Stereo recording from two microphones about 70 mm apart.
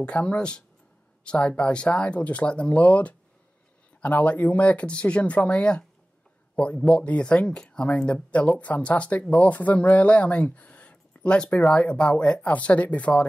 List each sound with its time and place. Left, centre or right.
0.0 s speech: centre
4.2 s speech: left